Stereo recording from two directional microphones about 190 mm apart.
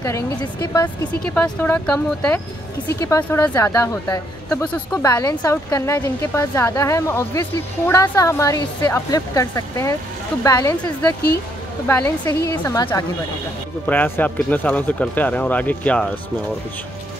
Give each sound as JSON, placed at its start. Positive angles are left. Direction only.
{"t": 0.0, "sound": "a woman's voice", "side_deg": 15}
{"t": 1.2, "sound": "a woman's voice", "side_deg": 5}